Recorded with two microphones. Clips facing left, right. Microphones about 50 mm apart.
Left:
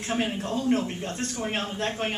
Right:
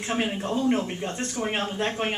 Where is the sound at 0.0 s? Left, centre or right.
Centre.